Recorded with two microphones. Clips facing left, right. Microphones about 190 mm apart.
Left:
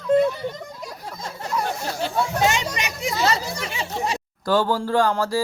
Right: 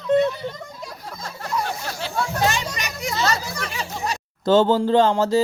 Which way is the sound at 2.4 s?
20° left (ahead or behind).